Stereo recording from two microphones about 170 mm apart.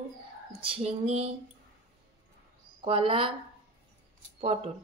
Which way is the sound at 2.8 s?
35° right (ahead or behind).